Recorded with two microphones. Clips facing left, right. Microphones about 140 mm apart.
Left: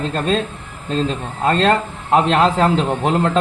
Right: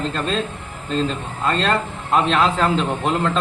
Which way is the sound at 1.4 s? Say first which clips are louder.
Left 4 dB; 40° left (ahead or behind).